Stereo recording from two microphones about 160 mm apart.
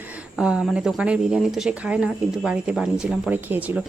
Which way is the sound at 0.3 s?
5° right (ahead or behind).